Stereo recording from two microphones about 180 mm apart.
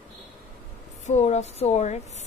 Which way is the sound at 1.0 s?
40° left (ahead or behind).